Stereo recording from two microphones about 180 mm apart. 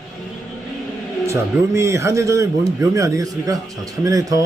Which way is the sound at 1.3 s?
15° right (ahead or behind).